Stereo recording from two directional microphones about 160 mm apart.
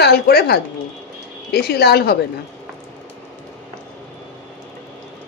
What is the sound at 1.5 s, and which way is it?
Speech, 85° left.